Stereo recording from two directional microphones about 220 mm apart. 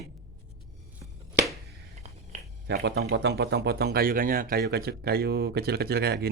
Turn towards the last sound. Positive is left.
turn(degrees=-45)  # may be behind; listen again after turning